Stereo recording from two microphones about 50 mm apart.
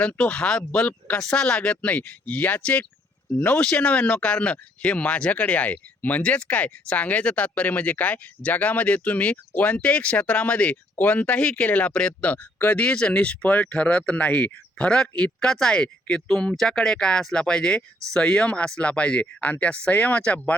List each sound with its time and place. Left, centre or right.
0.0 s speech: left
0.9 s speech: left
1.2 s speech: centre
12.2 s speech: left